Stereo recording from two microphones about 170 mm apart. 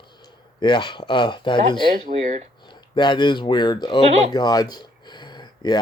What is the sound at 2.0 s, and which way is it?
Speech, 40° right (ahead or behind).